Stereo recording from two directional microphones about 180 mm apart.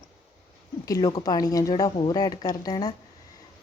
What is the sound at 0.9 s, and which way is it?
A woman's voice, 20° left (ahead or behind).